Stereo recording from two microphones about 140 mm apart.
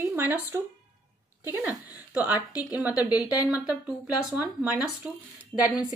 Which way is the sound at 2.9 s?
25° left (ahead or behind).